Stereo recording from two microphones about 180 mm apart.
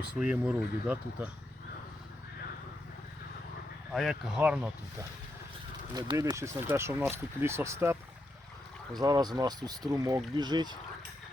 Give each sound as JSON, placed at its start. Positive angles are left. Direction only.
{"t": 0.2, "sound": "speech", "side_deg": -5}
{"t": 3.9, "sound": "speech", "side_deg": 0}
{"t": 5.9, "sound": "speech", "side_deg": -20}